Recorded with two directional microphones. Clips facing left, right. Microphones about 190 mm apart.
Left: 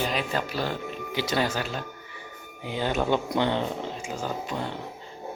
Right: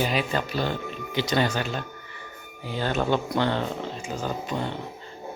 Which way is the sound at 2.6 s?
15° left (ahead or behind).